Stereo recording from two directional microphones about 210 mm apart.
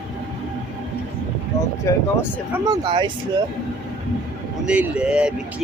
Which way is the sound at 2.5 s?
20° right (ahead or behind).